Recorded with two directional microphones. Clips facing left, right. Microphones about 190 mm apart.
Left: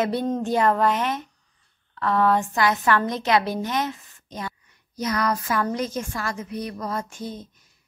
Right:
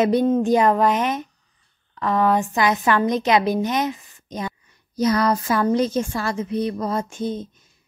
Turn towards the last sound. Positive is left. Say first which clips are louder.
# right 7 dB
turn(degrees=-25)  # may be behind; listen again after turning